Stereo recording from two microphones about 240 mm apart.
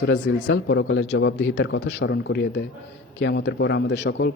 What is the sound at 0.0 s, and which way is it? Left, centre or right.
Speech, left.